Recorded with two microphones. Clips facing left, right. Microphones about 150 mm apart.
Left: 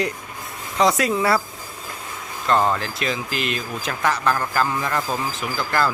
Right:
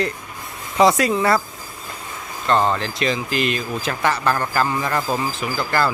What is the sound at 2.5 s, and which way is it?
Speech, 5° left (ahead or behind).